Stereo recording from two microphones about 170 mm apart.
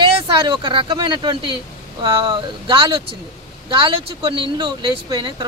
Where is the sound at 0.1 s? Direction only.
30° right (ahead or behind).